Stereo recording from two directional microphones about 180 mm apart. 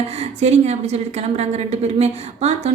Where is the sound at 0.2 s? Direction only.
40° right (ahead or behind).